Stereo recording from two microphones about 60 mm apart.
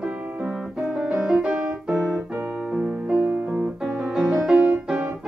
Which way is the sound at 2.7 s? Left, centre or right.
Right.